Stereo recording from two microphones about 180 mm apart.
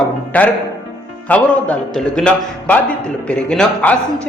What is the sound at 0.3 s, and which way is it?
A man's voice, 10° left (ahead or behind).